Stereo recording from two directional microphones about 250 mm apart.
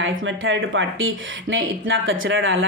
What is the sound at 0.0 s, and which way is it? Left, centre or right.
A woman's voice, right.